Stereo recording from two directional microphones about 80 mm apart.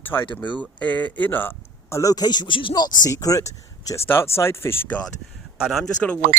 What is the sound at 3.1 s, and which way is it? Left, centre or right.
Speech, left.